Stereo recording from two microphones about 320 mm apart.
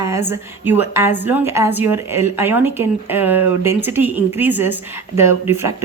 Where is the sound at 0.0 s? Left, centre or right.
Centre.